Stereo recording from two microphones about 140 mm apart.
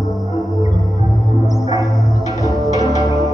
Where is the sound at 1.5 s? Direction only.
30° right (ahead or behind).